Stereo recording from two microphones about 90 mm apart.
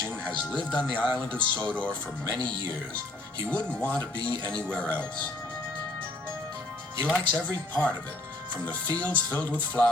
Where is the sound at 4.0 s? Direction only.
55° right (ahead or behind).